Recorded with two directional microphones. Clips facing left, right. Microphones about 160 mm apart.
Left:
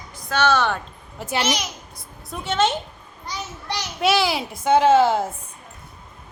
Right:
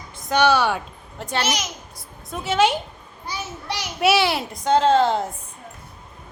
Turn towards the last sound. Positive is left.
turn(degrees=5)  # may be behind; listen again after turning